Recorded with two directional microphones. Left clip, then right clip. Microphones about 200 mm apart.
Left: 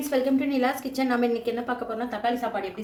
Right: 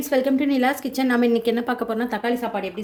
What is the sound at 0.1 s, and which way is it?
A woman's voice, 35° right (ahead or behind).